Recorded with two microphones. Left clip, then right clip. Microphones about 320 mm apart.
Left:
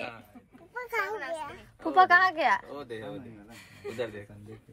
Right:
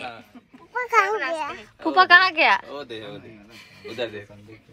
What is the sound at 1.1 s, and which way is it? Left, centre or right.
Speech, centre.